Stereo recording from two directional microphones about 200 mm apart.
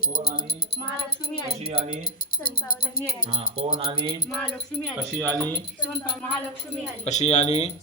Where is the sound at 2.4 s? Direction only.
50° left (ahead or behind).